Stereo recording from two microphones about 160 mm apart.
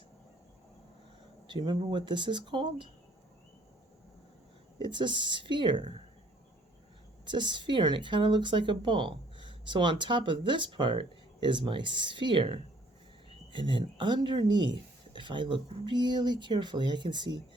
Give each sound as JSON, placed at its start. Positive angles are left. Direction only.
{"t": 1.5, "sound": "speech", "side_deg": -30}
{"t": 4.8, "sound": "speech", "side_deg": -30}
{"t": 7.3, "sound": "speech", "side_deg": -30}